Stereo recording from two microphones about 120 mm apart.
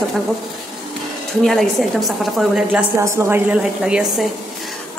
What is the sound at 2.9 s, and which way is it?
Speech, 25° right (ahead or behind).